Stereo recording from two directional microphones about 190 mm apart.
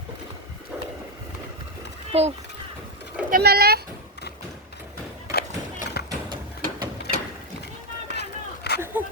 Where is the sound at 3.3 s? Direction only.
55° right (ahead or behind).